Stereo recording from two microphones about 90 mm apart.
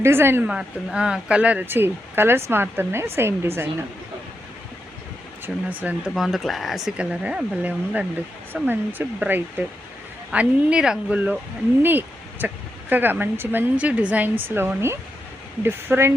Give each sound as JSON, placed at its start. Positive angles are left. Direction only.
{"t": 0.0, "sound": "speech", "side_deg": -25}
{"t": 0.4, "sound": "speech", "side_deg": -10}
{"t": 5.5, "sound": "speech", "side_deg": -5}
{"t": 6.1, "sound": "speech", "side_deg": 0}
{"t": 11.8, "sound": "speech", "side_deg": -20}